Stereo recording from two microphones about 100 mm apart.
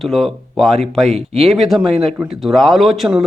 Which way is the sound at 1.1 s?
90° right.